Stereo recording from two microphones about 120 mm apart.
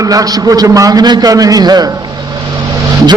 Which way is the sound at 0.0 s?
30° right (ahead or behind).